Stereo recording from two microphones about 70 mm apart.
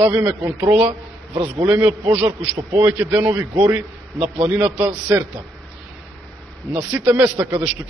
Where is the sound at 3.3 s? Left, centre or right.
Right.